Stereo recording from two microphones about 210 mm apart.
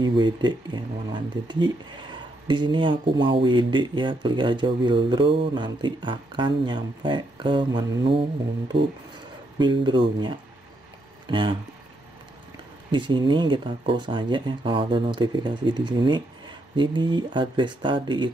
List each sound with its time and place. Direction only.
0.0 s speech: 20° right (ahead or behind)
12.9 s speech: 20° right (ahead or behind)